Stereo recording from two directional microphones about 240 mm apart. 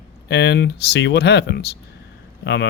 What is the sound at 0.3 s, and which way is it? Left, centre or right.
Speech, left.